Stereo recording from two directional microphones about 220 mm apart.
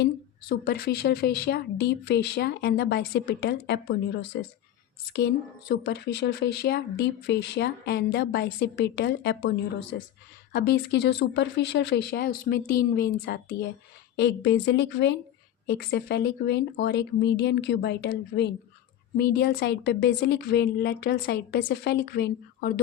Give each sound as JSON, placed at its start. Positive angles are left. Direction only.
{"t": 0.0, "sound": "speech", "side_deg": 45}